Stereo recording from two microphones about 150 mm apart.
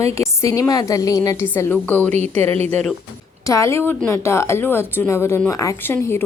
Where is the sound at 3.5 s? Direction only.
20° left (ahead or behind).